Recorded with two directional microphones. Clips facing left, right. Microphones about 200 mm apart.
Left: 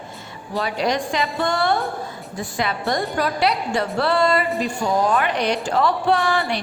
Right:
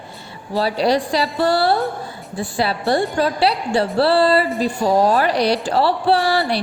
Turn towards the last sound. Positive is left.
turn(degrees=-35)  # may be behind; listen again after turning